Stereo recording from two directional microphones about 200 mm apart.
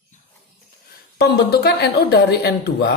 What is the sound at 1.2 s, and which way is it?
Speech, 55° left (ahead or behind).